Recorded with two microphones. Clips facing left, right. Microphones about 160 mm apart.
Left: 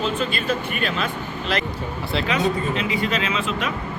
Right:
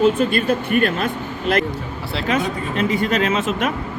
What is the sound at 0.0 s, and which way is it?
Speech, 50° right (ahead or behind).